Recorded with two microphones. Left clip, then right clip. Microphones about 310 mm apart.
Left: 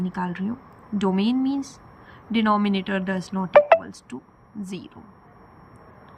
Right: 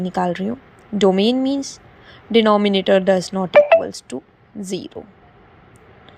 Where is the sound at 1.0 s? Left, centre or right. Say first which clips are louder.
Right 9 dB; centre.